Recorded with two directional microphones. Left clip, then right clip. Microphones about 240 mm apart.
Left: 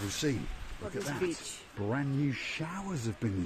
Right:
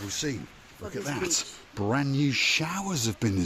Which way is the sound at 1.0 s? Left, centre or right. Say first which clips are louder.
Right 6 dB; right.